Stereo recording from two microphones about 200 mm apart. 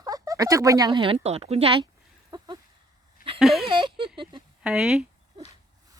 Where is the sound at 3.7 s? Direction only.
25° right (ahead or behind).